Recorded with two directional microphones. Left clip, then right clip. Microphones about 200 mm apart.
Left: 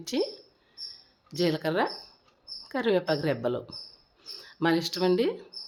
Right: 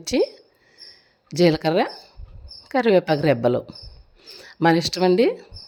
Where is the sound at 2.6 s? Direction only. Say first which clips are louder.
Right 8 dB; 35° right (ahead or behind).